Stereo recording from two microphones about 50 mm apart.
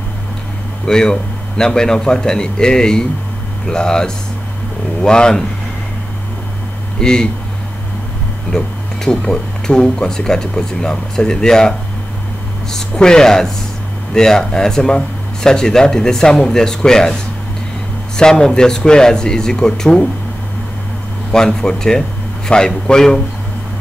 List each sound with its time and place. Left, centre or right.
0.8 s speech: centre
7.0 s speech: centre
8.5 s speech: centre
12.7 s speech: centre
21.3 s speech: centre